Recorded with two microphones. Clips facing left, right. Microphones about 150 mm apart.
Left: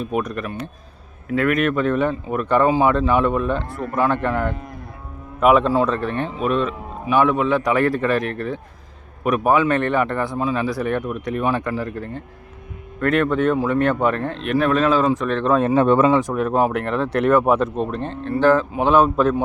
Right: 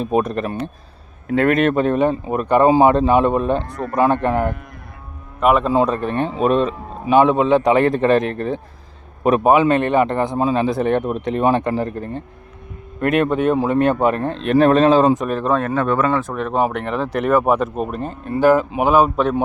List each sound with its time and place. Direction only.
0.0 s a man's voice: 25° right (ahead or behind)
5.4 s speech: centre (ahead or behind)
5.7 s speech: 15° right (ahead or behind)
6.4 s speech: 35° right (ahead or behind)
7.1 s a man's voice: 20° right (ahead or behind)
14.4 s a man's voice: 30° right (ahead or behind)
15.2 s speech: 10° right (ahead or behind)
15.6 s speech: 25° left (ahead or behind)
16.3 s speech: 5° left (ahead or behind)